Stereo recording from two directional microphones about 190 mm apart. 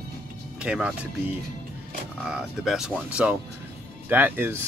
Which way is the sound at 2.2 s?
5° right (ahead or behind).